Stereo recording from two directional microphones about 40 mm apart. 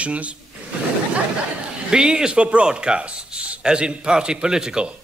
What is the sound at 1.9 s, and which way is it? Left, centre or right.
Speech, right.